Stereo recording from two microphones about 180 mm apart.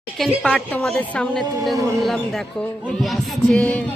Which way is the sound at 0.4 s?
5° left (ahead or behind).